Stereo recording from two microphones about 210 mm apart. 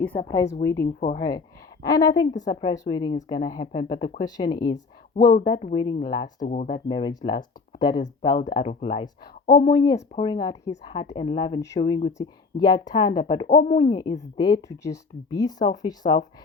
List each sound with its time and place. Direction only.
0.0 s a woman's voice: 10° left (ahead or behind)
6.2 s speech: 35° left (ahead or behind)
6.7 s speech: 25° left (ahead or behind)